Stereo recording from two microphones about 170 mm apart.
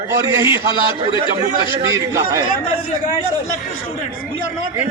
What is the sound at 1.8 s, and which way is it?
Speech, 20° right (ahead or behind).